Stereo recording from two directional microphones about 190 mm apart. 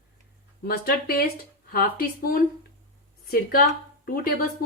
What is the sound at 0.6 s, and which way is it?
A woman's voice, 50° left (ahead or behind).